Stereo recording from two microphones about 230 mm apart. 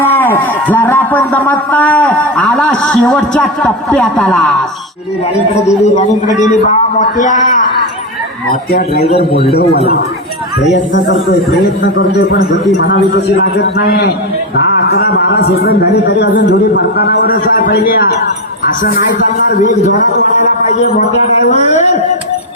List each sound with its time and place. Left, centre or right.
0.0 s a man's voice: centre
5.6 s a man's voice: left
10.7 s a man's voice: left
12.7 s a man's voice: left
21.5 s a man's voice: left